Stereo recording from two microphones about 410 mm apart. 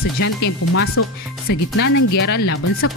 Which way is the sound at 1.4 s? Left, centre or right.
Left.